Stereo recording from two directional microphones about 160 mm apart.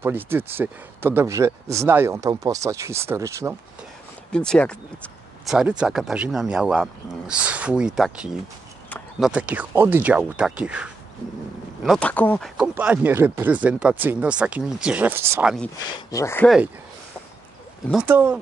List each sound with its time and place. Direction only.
0.0 s speech: 15° right (ahead or behind)
4.3 s speech: 5° left (ahead or behind); by 15.4 s 15° right (ahead or behind)
15.4 s speech: centre (ahead or behind)
16.1 s speech: 20° left (ahead or behind)
17.9 s speech: 10° right (ahead or behind)